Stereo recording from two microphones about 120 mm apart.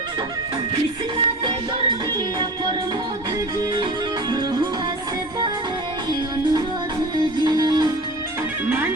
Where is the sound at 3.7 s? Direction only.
35° right (ahead or behind).